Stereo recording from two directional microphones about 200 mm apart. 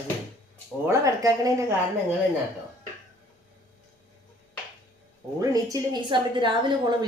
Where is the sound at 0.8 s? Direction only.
15° right (ahead or behind).